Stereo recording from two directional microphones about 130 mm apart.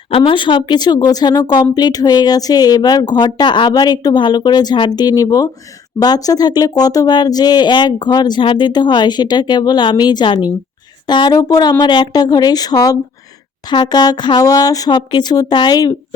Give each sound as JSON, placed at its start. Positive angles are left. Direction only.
{"t": 0.2, "sound": "speech", "side_deg": 40}